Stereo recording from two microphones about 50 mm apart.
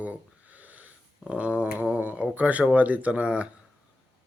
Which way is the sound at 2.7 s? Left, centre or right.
Right.